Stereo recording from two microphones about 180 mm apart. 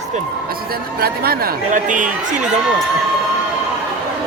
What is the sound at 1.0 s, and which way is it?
Speech, 55° right (ahead or behind).